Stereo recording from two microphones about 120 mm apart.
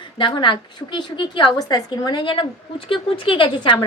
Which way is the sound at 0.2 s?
40° left (ahead or behind).